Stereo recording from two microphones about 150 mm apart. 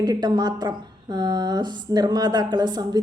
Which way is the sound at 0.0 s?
25° right (ahead or behind).